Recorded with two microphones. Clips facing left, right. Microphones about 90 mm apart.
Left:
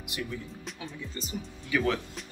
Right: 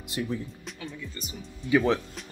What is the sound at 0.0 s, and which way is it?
Speech, 30° right (ahead or behind).